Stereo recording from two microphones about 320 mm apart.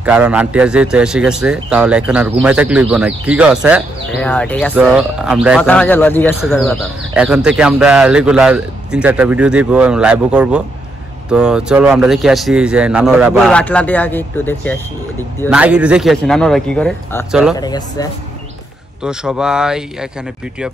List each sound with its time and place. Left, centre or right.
0.0 s speech: centre
17.6 s speech: centre
19.0 s speech: centre